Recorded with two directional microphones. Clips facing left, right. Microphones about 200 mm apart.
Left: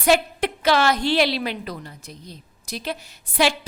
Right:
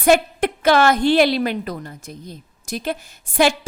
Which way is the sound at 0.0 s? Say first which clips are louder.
Right 4 dB; 50° right (ahead or behind).